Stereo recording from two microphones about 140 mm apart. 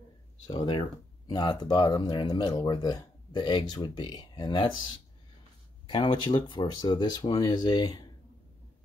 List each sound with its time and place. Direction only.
0.5 s speech: 35° left (ahead or behind)